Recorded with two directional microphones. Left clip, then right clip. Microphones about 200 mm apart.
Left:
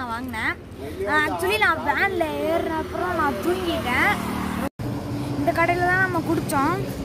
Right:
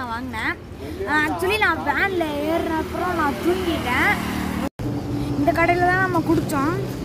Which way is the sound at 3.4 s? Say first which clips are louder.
Right 2 dB; 35° right (ahead or behind).